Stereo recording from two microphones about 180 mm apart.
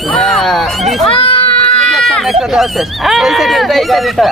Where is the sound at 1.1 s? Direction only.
30° left (ahead or behind).